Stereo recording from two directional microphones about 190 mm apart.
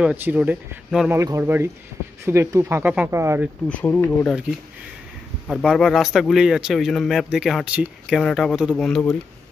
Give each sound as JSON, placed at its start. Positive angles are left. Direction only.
{"t": 0.0, "sound": "speech", "side_deg": -5}
{"t": 3.6, "sound": "speech", "side_deg": 10}
{"t": 5.5, "sound": "speech", "side_deg": 0}